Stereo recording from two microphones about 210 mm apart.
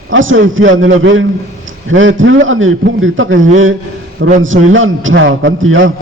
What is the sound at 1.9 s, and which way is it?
A man's voice, 65° right (ahead or behind).